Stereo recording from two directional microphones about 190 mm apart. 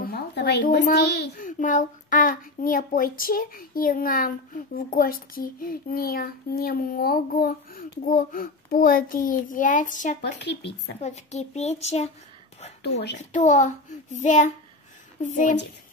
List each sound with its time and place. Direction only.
0.0 s a sound: 55° left (ahead or behind)
0.9 s speech: 60° left (ahead or behind)
1.4 s a child's voice: 45° left (ahead or behind)
10.4 s speech: 60° left (ahead or behind)
11.0 s a child's voice: 35° left (ahead or behind)
13.3 s a child's voice: 40° left (ahead or behind)